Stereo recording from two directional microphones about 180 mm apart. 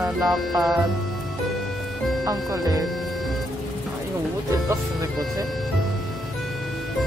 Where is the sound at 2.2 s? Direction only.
20° right (ahead or behind).